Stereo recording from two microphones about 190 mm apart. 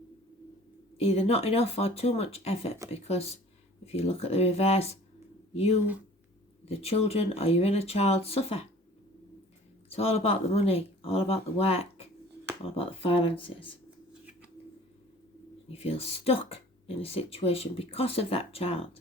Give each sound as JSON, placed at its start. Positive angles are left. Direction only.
{"t": 0.9, "sound": "speech", "side_deg": 35}
{"t": 9.9, "sound": "speech", "side_deg": 30}
{"t": 15.7, "sound": "speech", "side_deg": 30}